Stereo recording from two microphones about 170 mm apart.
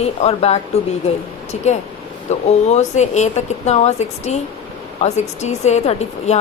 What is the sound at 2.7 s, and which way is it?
A woman's voice, 40° left (ahead or behind).